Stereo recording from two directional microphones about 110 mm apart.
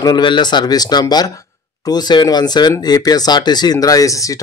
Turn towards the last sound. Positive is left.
turn(degrees=30)  # may be behind; listen again after turning